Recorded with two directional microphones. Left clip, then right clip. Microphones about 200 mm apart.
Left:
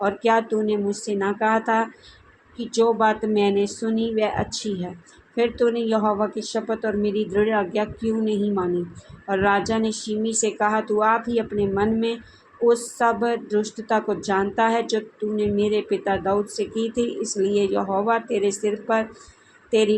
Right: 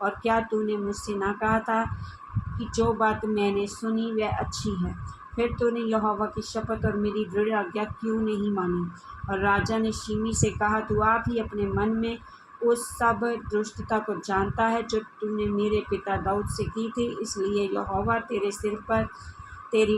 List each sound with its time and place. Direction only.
0.0 s speech: 25° left (ahead or behind)